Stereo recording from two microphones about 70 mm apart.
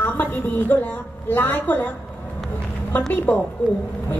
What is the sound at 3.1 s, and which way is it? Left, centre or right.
Speech, left.